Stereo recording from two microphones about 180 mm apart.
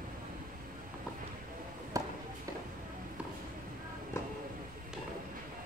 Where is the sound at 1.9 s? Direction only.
20° right (ahead or behind).